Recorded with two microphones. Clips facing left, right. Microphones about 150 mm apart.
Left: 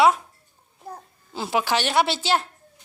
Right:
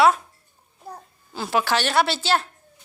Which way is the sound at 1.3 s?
20° left (ahead or behind).